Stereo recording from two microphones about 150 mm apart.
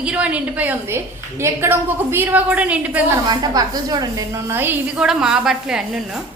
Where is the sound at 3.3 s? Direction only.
25° right (ahead or behind); by 6.0 s 5° right (ahead or behind).